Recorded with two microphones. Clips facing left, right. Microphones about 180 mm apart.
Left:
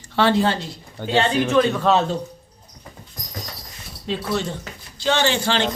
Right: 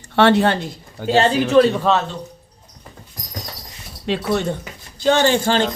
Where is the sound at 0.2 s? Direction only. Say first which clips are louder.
Right 4 dB; 70° right (ahead or behind).